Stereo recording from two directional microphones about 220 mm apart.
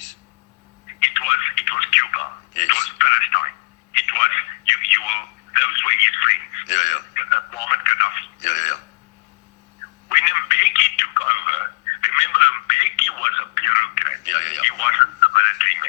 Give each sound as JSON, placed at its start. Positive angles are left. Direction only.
{"t": 1.0, "sound": "telephone", "side_deg": 35}
{"t": 10.1, "sound": "telephone", "side_deg": 35}